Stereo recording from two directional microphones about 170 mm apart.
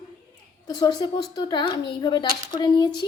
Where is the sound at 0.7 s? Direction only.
25° left (ahead or behind).